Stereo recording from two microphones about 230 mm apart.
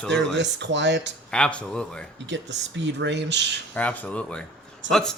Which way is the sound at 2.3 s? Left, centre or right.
Right.